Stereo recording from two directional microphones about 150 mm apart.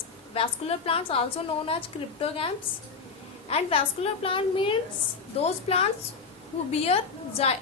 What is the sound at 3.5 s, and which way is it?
A woman's voice, 40° left (ahead or behind).